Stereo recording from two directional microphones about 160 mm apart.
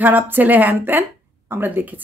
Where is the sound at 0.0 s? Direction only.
10° right (ahead or behind).